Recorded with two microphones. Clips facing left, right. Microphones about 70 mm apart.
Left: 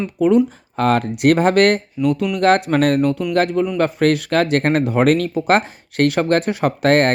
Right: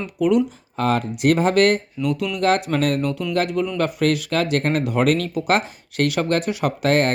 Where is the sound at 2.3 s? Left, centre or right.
Left.